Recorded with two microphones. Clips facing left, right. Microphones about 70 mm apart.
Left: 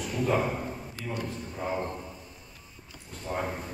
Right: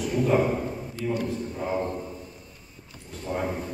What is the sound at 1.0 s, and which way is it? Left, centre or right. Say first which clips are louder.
Speech: right 8 dB; right.